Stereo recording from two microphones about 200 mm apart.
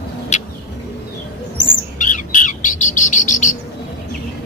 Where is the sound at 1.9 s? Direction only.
40° left (ahead or behind).